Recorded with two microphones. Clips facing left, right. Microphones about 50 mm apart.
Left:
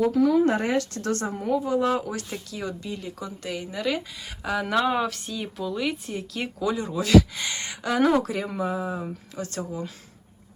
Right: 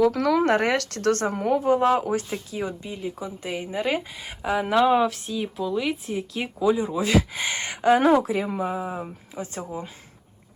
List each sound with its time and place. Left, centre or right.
0.0 s speech: right
0.4 s speech: right
2.3 s speech: right
7.0 s speech: right
8.1 s speech: centre